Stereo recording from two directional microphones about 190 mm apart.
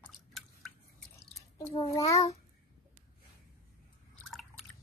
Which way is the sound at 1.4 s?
15° left (ahead or behind).